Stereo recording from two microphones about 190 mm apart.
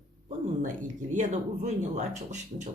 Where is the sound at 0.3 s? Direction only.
40° right (ahead or behind).